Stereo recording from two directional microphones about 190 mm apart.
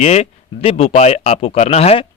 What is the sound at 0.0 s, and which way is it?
Speech, 35° left (ahead or behind).